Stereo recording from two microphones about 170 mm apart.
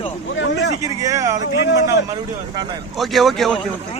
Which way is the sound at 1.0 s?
20° right (ahead or behind).